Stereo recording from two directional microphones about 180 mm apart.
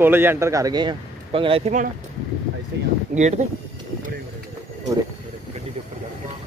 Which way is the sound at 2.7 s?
70° right (ahead or behind).